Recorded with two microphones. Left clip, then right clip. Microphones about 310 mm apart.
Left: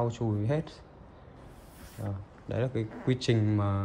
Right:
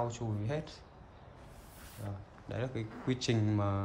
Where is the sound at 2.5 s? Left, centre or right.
Centre.